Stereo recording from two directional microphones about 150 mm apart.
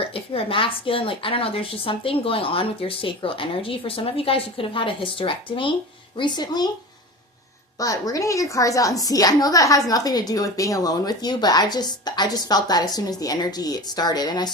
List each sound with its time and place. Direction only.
0.0 s a woman's voice: 40° left (ahead or behind)
7.8 s a woman's voice: 25° left (ahead or behind)